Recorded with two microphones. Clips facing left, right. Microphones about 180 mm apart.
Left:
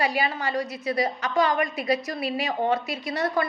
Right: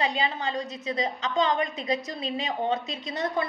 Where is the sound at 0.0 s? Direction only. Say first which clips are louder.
Left 2 dB; 20° right (ahead or behind).